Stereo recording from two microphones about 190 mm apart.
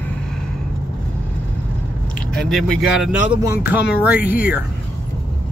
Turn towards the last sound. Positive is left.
turn(degrees=-5)  # may be behind; listen again after turning